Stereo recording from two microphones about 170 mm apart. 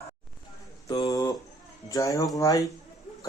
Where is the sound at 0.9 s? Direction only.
20° left (ahead or behind).